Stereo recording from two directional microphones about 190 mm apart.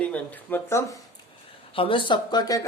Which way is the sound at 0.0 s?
10° left (ahead or behind).